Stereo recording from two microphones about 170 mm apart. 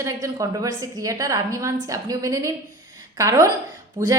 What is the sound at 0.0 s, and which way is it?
A woman's voice, 20° right (ahead or behind).